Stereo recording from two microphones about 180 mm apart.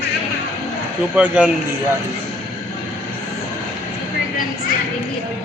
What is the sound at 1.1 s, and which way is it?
Speech, 5° right (ahead or behind).